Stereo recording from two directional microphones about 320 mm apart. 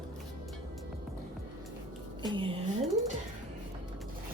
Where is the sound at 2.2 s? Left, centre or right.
Centre.